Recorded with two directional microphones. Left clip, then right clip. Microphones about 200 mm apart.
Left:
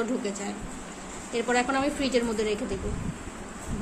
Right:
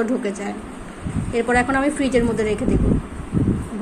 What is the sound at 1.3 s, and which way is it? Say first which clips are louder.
A woman's voice: right 7 dB; 10° right (ahead or behind).